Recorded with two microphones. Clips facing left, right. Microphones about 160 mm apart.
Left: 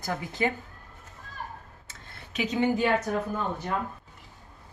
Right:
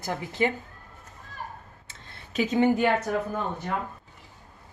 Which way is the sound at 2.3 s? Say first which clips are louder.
Right 4 dB; 50° right (ahead or behind).